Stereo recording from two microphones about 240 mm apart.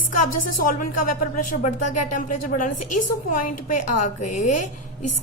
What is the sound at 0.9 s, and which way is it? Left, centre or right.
A woman's voice, left.